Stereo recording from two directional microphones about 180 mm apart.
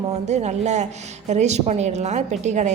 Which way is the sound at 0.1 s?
40° right (ahead or behind).